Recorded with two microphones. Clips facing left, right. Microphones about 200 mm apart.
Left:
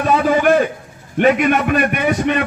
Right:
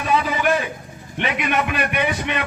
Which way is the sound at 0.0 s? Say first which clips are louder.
Left 6 dB; 50° left (ahead or behind).